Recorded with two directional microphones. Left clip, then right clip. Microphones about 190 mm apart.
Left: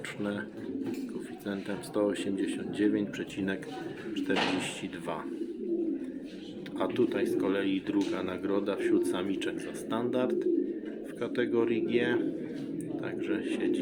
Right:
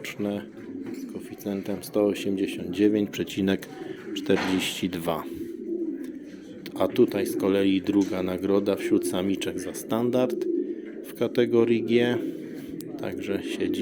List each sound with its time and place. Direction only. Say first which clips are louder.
1.5 s speech: right 6 dB; 30° right (ahead or behind)
6.7 s speech: right 6 dB; 40° right (ahead or behind)